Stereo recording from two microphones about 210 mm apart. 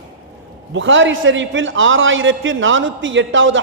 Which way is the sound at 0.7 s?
65° right (ahead or behind).